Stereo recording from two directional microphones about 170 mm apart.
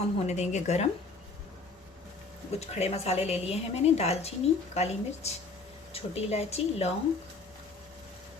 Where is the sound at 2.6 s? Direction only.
40° left (ahead or behind).